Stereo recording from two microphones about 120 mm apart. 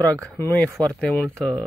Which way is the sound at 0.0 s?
15° left (ahead or behind).